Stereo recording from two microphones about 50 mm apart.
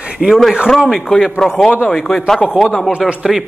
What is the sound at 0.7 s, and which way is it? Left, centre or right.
Speech, centre.